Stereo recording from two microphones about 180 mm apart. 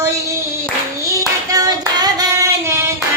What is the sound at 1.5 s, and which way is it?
Child singing, 20° right (ahead or behind).